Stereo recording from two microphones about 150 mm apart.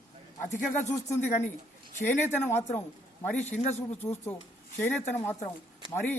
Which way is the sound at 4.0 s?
15° left (ahead or behind).